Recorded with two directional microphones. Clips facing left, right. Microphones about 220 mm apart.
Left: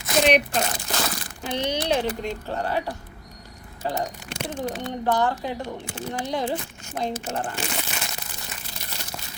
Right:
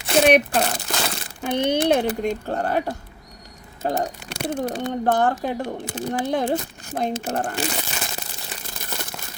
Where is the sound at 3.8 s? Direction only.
50° right (ahead or behind); by 7.7 s 35° right (ahead or behind).